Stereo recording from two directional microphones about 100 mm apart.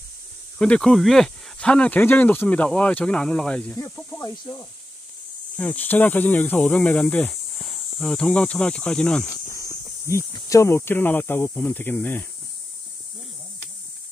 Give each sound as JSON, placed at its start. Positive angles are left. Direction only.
{"t": 0.6, "sound": "speech", "side_deg": 5}
{"t": 4.2, "sound": "speech", "side_deg": 30}
{"t": 5.6, "sound": "speech", "side_deg": 15}
{"t": 7.6, "sound": "speech", "side_deg": 5}
{"t": 9.5, "sound": "a sound", "side_deg": 30}
{"t": 10.3, "sound": "speech", "side_deg": 30}